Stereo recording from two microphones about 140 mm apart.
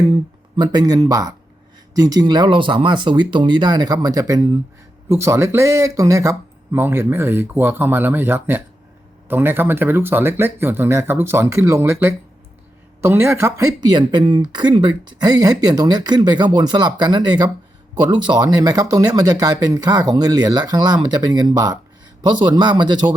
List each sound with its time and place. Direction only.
0.5 s speech: 30° right (ahead or behind)
13.8 s speech: 35° right (ahead or behind)